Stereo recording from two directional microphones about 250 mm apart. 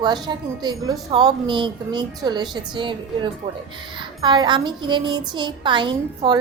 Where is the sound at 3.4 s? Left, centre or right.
Right.